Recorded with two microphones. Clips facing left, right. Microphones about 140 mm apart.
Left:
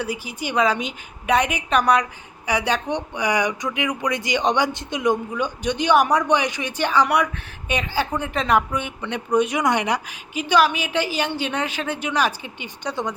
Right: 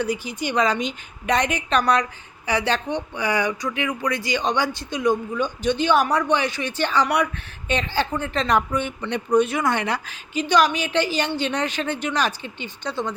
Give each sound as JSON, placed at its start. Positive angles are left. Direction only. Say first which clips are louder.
{"t": 0.0, "sound": "speech", "louder": "right 3 dB", "side_deg": 10}